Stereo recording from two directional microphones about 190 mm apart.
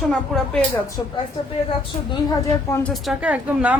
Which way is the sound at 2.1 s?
20° left (ahead or behind).